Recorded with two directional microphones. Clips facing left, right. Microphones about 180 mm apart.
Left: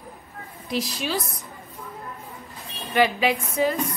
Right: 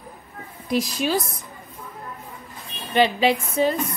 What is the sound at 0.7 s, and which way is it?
Speech, 50° right (ahead or behind).